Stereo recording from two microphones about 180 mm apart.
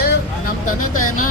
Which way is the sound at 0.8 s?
50° left (ahead or behind).